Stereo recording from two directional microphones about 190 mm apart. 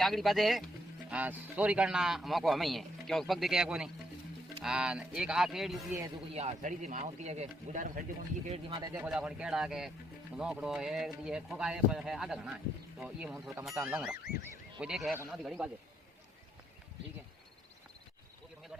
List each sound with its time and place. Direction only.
0.0 s a man's voice: centre (ahead or behind)
6.3 s speech: 35° right (ahead or behind)
8.8 s a man's voice: 15° right (ahead or behind)